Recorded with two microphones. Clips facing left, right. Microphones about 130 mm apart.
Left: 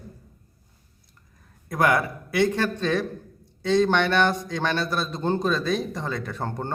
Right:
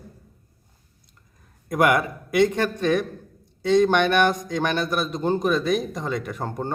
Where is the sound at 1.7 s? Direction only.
20° right (ahead or behind).